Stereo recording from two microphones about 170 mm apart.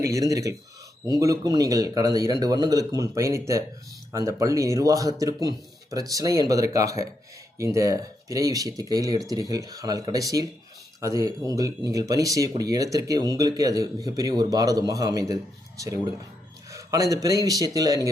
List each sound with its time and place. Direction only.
0.0 s speech: 20° right (ahead or behind)
16.7 s speech: 20° right (ahead or behind)